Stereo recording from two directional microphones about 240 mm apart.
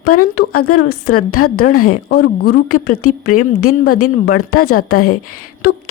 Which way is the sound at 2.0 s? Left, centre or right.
Left.